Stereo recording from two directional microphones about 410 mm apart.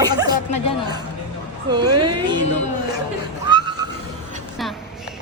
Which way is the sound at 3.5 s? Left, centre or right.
Centre.